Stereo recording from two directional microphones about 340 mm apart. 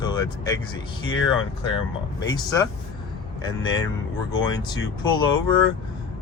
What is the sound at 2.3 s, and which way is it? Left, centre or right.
Speech, centre.